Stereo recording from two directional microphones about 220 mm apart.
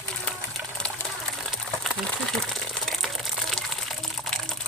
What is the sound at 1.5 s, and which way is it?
Crumpling, centre (ahead or behind).